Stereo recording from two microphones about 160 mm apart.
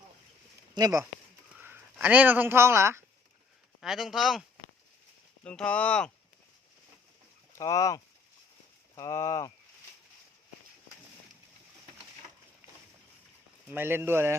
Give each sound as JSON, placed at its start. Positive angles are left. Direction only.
{"t": 0.7, "sound": "speech", "side_deg": -25}
{"t": 1.5, "sound": "speech", "side_deg": -10}
{"t": 3.8, "sound": "speech", "side_deg": 0}
{"t": 7.6, "sound": "speech", "side_deg": 20}
{"t": 13.7, "sound": "speech", "side_deg": -15}